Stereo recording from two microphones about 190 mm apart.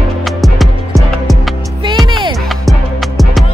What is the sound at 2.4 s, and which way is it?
Music, centre (ahead or behind).